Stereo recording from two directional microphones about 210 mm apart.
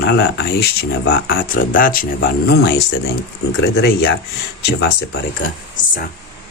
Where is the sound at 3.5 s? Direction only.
60° left (ahead or behind).